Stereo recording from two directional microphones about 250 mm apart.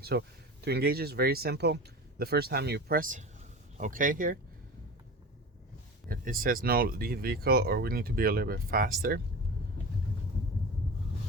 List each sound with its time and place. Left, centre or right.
0.0 s speech: right
6.1 s speech: right